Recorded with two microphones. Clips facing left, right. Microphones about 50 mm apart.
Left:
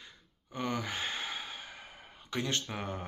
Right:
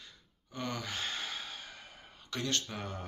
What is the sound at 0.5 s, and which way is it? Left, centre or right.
Speech, centre.